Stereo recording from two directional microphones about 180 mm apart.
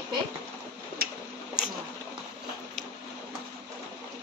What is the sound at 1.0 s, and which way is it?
Tick-tock, 55° right (ahead or behind).